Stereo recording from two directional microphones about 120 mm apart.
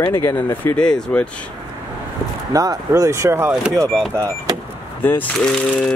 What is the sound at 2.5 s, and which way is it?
Speech, 30° right (ahead or behind).